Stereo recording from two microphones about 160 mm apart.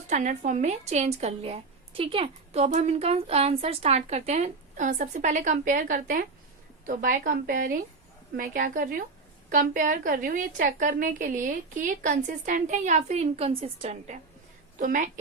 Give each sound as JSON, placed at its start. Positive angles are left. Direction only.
{"t": 0.1, "sound": "a woman's voice", "side_deg": -50}
{"t": 14.8, "sound": "a woman's voice", "side_deg": -55}